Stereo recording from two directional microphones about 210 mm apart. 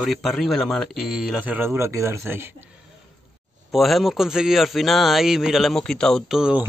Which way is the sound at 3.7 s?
Centre (ahead or behind).